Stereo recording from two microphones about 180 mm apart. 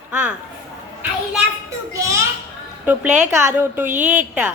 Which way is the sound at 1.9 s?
15° right (ahead or behind).